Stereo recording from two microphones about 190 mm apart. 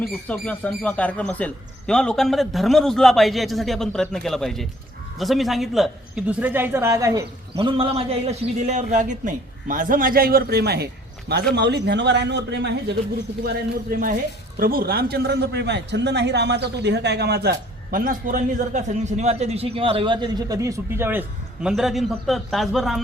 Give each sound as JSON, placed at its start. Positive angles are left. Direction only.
{"t": 0.0, "sound": "a man's voice", "side_deg": 5}
{"t": 7.5, "sound": "a man's voice", "side_deg": -25}
{"t": 13.4, "sound": "a man's voice", "side_deg": -50}
{"t": 17.9, "sound": "a man's voice", "side_deg": -45}